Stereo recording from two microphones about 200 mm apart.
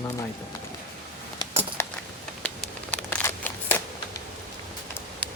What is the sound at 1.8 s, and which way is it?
Keys jangling, 10° left (ahead or behind).